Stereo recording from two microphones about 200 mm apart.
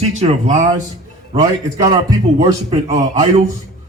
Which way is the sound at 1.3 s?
20° right (ahead or behind).